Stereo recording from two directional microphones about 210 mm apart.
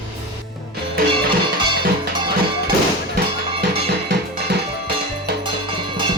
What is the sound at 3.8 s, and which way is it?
Music, 50° right (ahead or behind).